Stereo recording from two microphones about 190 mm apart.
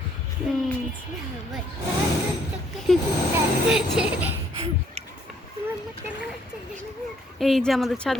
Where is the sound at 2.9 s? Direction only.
Centre (ahead or behind).